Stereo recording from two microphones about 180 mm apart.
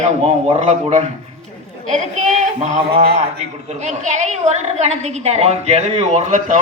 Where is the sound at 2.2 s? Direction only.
40° right (ahead or behind).